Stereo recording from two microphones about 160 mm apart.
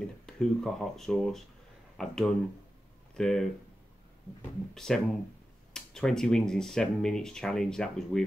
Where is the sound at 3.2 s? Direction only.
5° left (ahead or behind).